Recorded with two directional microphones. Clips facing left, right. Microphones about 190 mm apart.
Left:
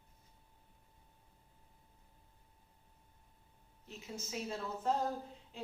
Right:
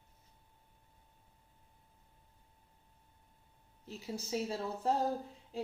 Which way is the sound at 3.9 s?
35° right (ahead or behind).